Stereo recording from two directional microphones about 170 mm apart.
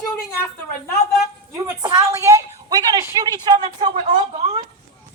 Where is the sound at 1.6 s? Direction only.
25° right (ahead or behind).